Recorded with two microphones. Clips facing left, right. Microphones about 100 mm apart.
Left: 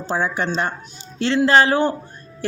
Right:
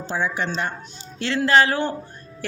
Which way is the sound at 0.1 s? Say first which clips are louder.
Left 3 dB; 40° left (ahead or behind).